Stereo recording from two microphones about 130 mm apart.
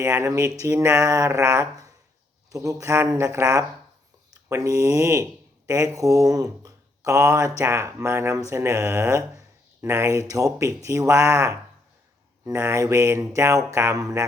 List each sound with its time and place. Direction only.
0.0 s speech: 20° right (ahead or behind)